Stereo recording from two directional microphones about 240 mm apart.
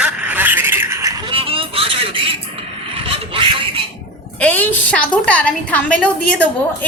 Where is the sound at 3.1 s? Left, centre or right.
Right.